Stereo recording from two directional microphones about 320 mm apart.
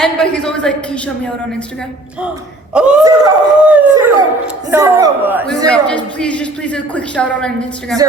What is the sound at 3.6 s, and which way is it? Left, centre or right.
Howl, centre.